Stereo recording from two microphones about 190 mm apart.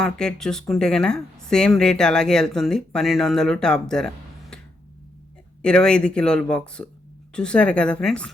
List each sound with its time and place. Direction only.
0.0 s speech: 5° left (ahead or behind)
5.6 s speech: 5° left (ahead or behind)